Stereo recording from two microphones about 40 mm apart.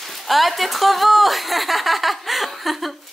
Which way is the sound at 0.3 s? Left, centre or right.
Centre.